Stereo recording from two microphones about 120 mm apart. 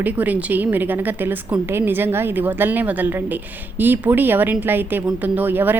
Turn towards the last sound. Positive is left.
turn(degrees=-15)  # may be behind; listen again after turning